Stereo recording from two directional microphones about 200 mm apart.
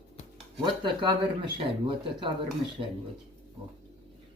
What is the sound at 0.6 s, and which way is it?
Speech, 25° right (ahead or behind).